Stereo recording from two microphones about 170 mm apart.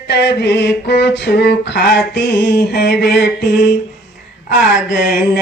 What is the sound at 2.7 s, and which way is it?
Mantra, 75° left (ahead or behind).